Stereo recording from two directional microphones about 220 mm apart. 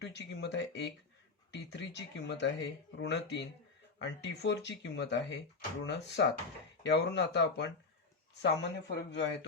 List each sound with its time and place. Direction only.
0.0 s speech: 50° left (ahead or behind)